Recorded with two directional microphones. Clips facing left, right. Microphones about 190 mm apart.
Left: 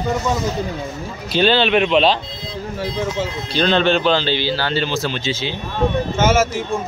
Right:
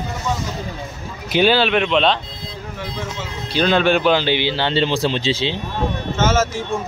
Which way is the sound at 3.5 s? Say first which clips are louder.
Even; 10° right (ahead or behind).